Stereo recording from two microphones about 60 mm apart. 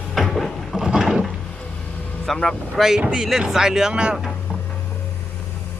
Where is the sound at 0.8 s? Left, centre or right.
Centre.